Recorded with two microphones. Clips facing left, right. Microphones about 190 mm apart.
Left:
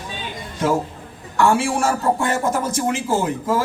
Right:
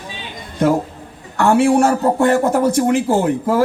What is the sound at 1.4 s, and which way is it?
A man's voice, 60° right (ahead or behind).